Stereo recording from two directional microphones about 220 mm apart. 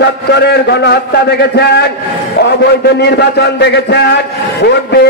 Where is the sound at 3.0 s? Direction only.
50° left (ahead or behind).